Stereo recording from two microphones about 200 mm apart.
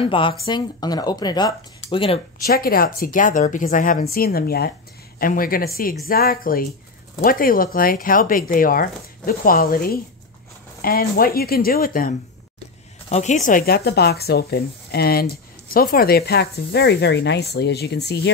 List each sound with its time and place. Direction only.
0.0 s speech: 25° left (ahead or behind)
2.4 s speech: 50° left (ahead or behind)